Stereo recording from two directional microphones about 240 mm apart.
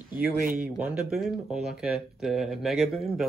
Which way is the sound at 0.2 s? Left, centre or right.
Right.